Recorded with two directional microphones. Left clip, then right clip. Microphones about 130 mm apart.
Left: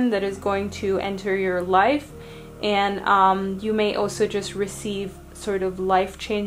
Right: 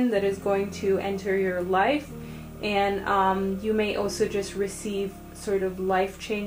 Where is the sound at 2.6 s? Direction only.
45° left (ahead or behind).